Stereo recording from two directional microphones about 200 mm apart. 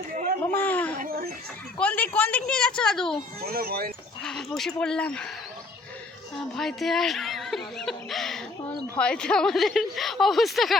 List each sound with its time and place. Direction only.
0.4 s speech: 10° left (ahead or behind)
0.9 s speech: 45° right (ahead or behind)
1.8 s a woman's voice: 10° left (ahead or behind)
3.4 s speech: 50° right (ahead or behind)
4.2 s a woman's voice: 5° left (ahead or behind)
6.6 s laughter: centre (ahead or behind)
9.0 s a woman's voice: 5° left (ahead or behind)